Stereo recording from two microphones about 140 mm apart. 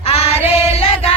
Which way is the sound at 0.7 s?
45° left (ahead or behind).